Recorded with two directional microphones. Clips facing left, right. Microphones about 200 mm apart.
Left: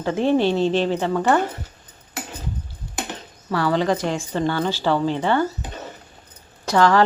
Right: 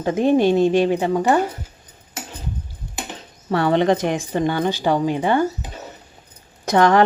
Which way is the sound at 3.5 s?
20° right (ahead or behind).